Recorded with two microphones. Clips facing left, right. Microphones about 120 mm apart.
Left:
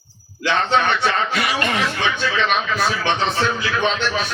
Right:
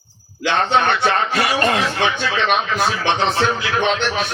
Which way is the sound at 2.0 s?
50° right (ahead or behind).